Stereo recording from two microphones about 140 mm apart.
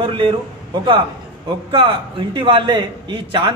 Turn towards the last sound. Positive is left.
turn(degrees=-35)  # may be behind; listen again after turning